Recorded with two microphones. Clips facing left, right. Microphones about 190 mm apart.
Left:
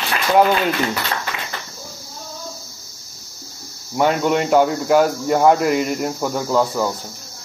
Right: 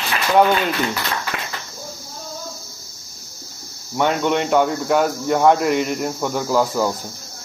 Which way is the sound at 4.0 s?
5° left (ahead or behind).